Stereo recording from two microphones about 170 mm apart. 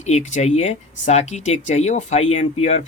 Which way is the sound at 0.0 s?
45° left (ahead or behind).